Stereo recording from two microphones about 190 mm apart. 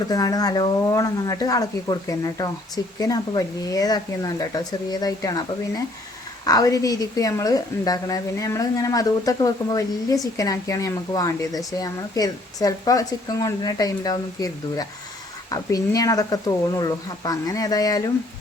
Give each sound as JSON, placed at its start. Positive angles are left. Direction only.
{"t": 0.1, "sound": "speech", "side_deg": 20}